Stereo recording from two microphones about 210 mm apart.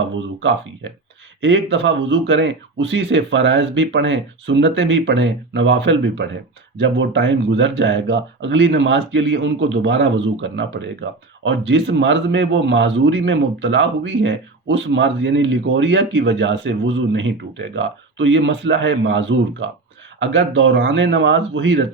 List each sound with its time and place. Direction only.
1.4 s a man's voice: 60° right (ahead or behind)